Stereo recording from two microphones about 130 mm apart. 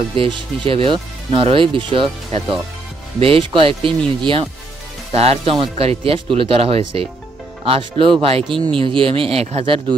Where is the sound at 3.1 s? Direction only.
45° right (ahead or behind).